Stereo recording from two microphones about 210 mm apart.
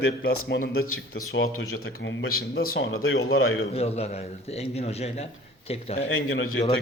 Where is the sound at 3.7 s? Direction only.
30° left (ahead or behind).